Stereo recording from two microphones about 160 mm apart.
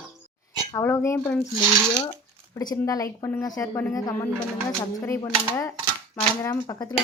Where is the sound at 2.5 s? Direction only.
20° left (ahead or behind).